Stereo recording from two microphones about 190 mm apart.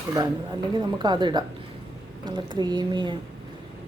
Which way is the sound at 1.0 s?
25° right (ahead or behind).